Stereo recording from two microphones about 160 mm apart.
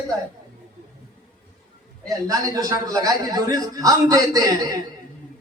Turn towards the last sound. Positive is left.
turn(degrees=-20)  # may be behind; listen again after turning